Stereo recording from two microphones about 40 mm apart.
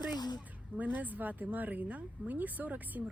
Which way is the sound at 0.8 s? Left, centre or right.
Right.